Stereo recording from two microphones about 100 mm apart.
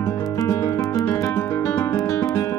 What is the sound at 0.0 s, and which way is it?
Music, 30° left (ahead or behind).